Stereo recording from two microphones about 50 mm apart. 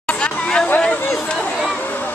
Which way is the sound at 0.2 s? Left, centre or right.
Centre.